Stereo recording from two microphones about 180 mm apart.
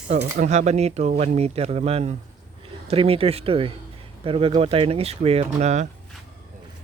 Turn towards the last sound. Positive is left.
turn(degrees=-40)  # may be behind; listen again after turning